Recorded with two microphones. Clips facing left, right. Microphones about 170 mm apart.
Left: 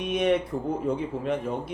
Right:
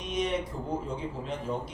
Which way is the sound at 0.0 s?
60° left (ahead or behind).